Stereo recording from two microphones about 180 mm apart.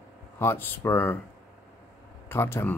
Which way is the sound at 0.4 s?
10° left (ahead or behind).